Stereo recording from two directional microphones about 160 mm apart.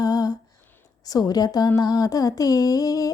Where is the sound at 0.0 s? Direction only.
25° left (ahead or behind).